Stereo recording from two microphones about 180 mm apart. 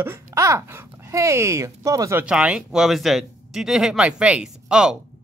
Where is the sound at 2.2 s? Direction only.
5° right (ahead or behind).